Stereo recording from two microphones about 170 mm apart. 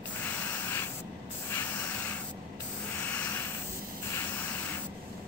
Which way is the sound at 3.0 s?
10° left (ahead or behind).